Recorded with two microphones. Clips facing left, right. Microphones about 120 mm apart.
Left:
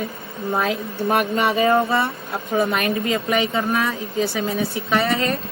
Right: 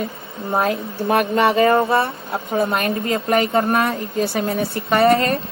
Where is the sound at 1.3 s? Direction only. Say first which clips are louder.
Right 4 dB; 60° right (ahead or behind).